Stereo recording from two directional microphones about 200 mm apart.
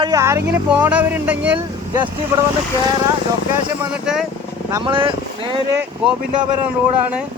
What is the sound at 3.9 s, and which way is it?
Speech, 5° right (ahead or behind).